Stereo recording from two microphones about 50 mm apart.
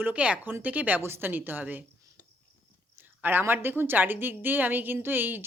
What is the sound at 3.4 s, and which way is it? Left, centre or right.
A woman's voice, right.